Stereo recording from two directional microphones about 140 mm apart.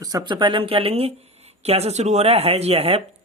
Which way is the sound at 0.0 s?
25° right (ahead or behind).